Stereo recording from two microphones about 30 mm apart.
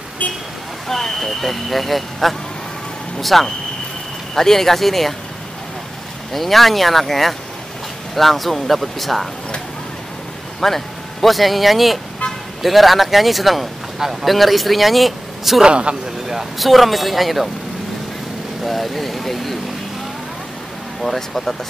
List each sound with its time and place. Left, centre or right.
0.2 s speech: left
0.8 s speech: centre
1.2 s speech: centre
6.3 s speech: centre
10.6 s speech: centre
15.6 s speech: right
16.5 s speech: centre
18.6 s speech: centre
21.0 s speech: centre